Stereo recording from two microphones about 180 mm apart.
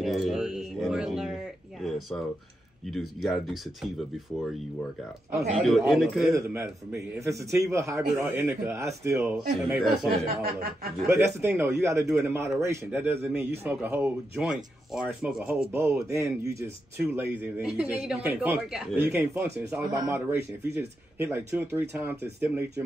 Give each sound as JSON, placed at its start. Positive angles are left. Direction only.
{"t": 0.0, "sound": "speech", "side_deg": 0}
{"t": 5.5, "sound": "speech", "side_deg": 0}
{"t": 6.3, "sound": "a man's voice", "side_deg": -15}
{"t": 10.2, "sound": "speech", "side_deg": -55}
{"t": 11.1, "sound": "a man's voice", "side_deg": -15}